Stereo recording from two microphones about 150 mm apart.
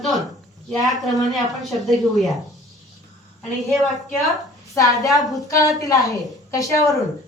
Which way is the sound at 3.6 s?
Centre (ahead or behind).